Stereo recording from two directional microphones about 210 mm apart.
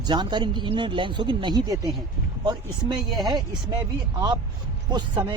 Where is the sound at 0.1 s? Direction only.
20° right (ahead or behind).